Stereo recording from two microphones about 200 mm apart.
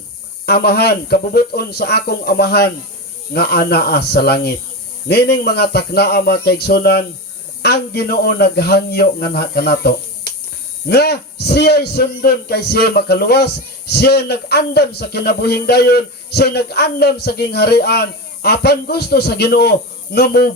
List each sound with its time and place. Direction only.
0.4 s a man's voice: 55° left (ahead or behind)